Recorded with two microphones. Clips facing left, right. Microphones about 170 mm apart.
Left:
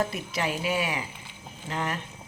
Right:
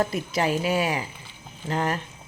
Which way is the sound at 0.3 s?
40° right (ahead or behind).